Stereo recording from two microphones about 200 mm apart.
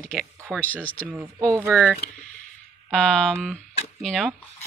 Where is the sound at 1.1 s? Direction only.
10° right (ahead or behind).